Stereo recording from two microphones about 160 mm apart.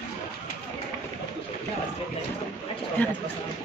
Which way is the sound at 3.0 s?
10° left (ahead or behind).